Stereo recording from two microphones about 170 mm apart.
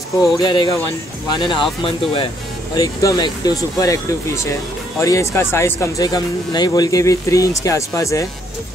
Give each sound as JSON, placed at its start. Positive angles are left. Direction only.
{"t": 0.2, "sound": "speech", "side_deg": 25}
{"t": 2.8, "sound": "speech", "side_deg": 20}